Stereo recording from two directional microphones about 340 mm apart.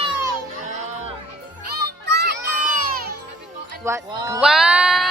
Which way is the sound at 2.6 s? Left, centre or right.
Right.